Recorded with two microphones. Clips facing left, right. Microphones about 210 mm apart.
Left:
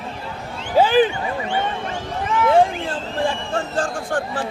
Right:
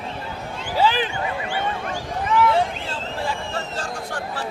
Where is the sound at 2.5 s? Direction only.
50° left (ahead or behind).